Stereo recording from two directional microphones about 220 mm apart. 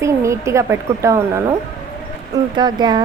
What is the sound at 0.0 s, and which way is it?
A woman's voice, 15° right (ahead or behind).